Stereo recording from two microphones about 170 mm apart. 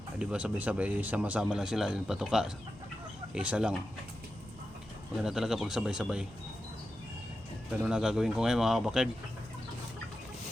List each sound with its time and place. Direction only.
0.2 s speech: 5° right (ahead or behind)
5.2 s speech: 5° right (ahead or behind)
7.7 s speech: 5° right (ahead or behind)